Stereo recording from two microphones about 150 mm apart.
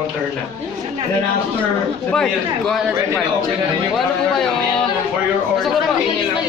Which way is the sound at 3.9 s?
5° left (ahead or behind).